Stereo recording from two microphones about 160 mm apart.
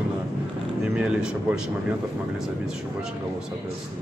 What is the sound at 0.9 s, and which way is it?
Speech, 5° right (ahead or behind).